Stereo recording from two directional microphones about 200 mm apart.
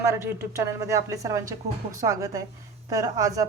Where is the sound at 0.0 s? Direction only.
15° right (ahead or behind).